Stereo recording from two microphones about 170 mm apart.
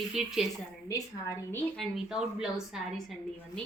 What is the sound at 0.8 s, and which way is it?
Speech, 20° left (ahead or behind).